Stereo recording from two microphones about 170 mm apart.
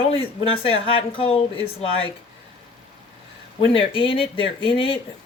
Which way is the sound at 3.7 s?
30° left (ahead or behind).